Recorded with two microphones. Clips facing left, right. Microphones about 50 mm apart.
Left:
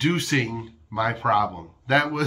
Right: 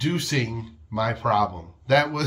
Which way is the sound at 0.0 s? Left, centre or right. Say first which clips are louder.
Left 3 dB; left.